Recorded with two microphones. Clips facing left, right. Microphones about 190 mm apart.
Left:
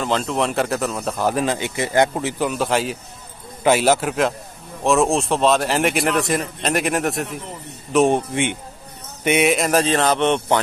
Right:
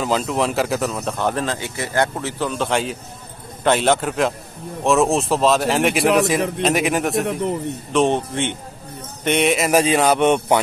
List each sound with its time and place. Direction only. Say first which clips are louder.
0.0 s speech: right 1 dB; 5° right (ahead or behind)
7.2 s a man's voice: right 10 dB; 65° right (ahead or behind)
7.9 s a man's voice: left 2 dB; 10° left (ahead or behind)
9.7 s a man's voice: right 2 dB; 10° right (ahead or behind)